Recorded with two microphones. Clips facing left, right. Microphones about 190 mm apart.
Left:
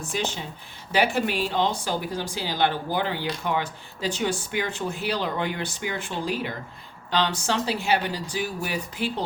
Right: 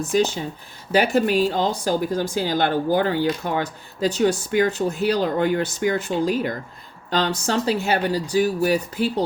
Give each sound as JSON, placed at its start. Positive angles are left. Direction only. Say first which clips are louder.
{"t": 0.1, "sound": "a woman's voice", "louder": "right 9 dB", "side_deg": -45}